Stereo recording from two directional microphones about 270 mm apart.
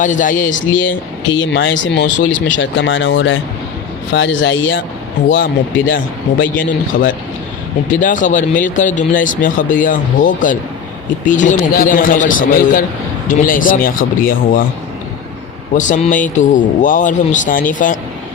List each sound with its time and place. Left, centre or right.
0.0 s speech: left
0.7 s speech: left
6.4 s speech: left
15.7 s speech: left